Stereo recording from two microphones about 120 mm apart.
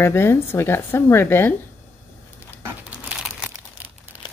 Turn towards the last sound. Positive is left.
turn(degrees=-5)  # may be behind; listen again after turning